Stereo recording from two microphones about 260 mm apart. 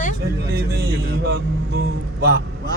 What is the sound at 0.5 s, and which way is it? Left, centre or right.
Music, right.